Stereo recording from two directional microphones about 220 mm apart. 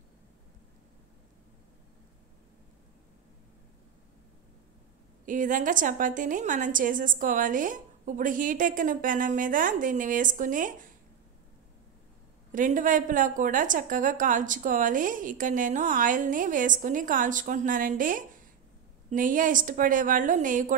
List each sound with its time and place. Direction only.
5.2 s a woman's voice: 35° right (ahead or behind)
12.5 s a woman's voice: 35° right (ahead or behind)